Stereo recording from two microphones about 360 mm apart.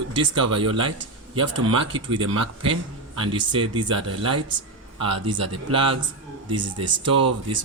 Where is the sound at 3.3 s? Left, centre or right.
Centre.